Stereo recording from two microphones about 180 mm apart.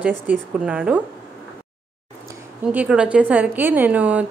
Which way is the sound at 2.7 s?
5° right (ahead or behind).